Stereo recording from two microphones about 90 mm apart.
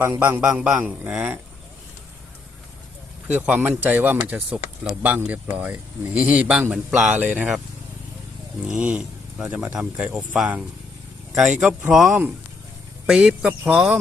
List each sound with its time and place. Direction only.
0.0 s a man's voice: 25° right (ahead or behind)
1.1 s speech: 5° right (ahead or behind)
3.2 s speech: 15° right (ahead or behind)
8.6 s speech: 15° right (ahead or behind)
11.3 s speech: 10° right (ahead or behind)